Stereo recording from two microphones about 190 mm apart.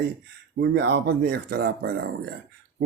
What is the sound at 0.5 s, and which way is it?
Speech, 60° right (ahead or behind).